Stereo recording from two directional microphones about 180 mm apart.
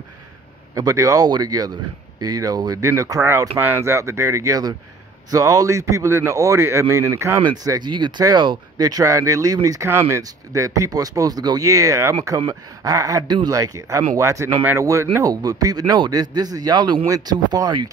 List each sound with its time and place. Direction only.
0.7 s a man's voice: 20° right (ahead or behind)